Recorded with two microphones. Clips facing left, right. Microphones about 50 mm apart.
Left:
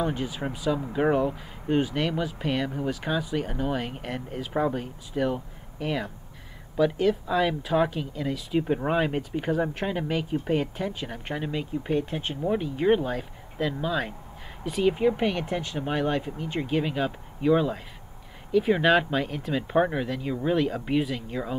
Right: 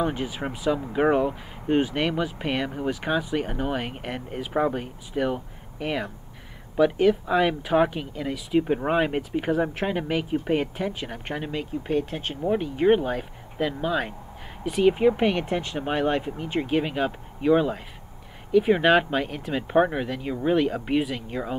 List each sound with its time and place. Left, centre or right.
0.0 s speech: right
8.2 s speech: centre